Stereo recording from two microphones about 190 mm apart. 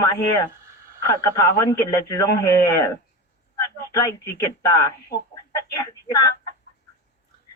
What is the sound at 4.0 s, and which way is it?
Speech, 20° left (ahead or behind).